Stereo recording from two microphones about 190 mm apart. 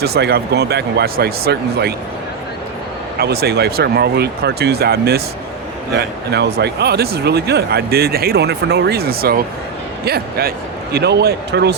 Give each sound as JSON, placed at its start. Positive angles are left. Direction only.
{"t": 0.0, "sound": "speech", "side_deg": -55}
{"t": 3.2, "sound": "speech", "side_deg": -55}